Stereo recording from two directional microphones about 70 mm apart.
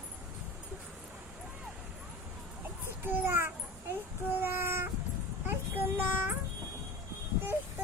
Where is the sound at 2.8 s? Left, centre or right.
Right.